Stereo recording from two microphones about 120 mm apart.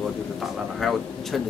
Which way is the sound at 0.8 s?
Centre (ahead or behind).